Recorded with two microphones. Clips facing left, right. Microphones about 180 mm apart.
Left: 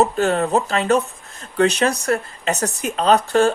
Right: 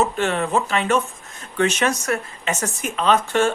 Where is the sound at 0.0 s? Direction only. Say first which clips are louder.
Left 4 dB; 40° left (ahead or behind).